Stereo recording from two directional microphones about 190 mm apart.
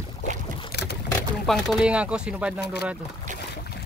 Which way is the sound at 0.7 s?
60° left (ahead or behind).